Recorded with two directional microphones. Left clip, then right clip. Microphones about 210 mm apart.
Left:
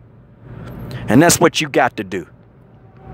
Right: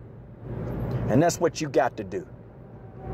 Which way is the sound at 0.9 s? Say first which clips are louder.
Left 10 dB; 35° left (ahead or behind).